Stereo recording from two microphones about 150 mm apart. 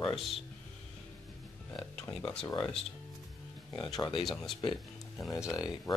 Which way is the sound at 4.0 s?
35° left (ahead or behind).